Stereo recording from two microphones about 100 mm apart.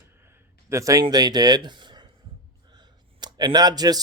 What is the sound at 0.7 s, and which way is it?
Speech, 30° right (ahead or behind).